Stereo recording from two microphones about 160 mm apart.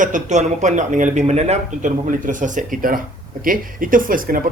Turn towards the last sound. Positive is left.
turn(degrees=-60)  # may be behind; listen again after turning